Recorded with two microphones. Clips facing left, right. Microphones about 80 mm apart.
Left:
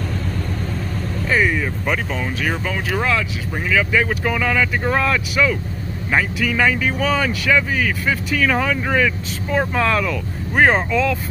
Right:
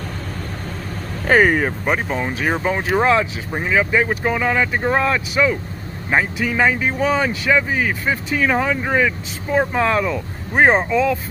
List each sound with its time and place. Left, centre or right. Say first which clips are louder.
1.2 s speech: right 5 dB; right
1.9 s speech: right 2 dB; right